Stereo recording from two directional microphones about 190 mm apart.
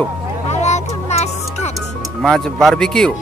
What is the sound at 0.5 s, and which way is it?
Music, 35° left (ahead or behind).